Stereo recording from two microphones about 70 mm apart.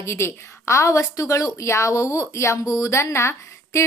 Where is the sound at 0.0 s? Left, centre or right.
Left.